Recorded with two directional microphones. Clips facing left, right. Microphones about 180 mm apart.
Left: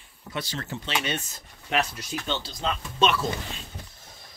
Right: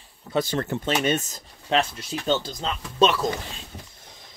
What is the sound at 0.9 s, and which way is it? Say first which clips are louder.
Speech: right 5 dB; 45° right (ahead or behind).